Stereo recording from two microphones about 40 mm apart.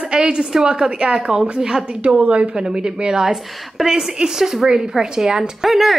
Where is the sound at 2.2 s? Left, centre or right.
Right.